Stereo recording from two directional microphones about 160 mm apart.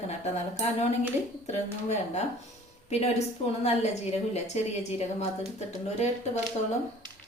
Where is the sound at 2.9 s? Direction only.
40° left (ahead or behind).